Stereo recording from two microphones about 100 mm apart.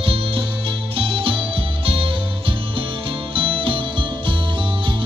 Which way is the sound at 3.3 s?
60° right (ahead or behind).